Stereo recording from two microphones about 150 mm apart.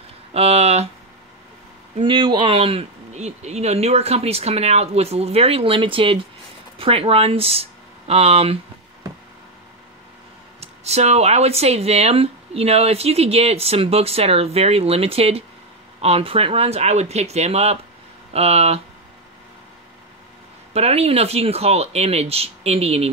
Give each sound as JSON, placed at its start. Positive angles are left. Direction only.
{"t": 0.3, "sound": "speech", "side_deg": -45}
{"t": 2.0, "sound": "speech", "side_deg": -35}
{"t": 10.6, "sound": "speech", "side_deg": -45}
{"t": 20.7, "sound": "speech", "side_deg": -45}